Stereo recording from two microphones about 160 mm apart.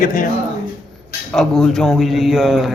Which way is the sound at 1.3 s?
Centre (ahead or behind).